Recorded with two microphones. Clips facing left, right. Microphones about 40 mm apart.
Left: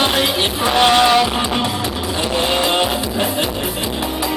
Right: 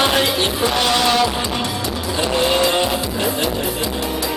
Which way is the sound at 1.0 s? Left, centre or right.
Centre.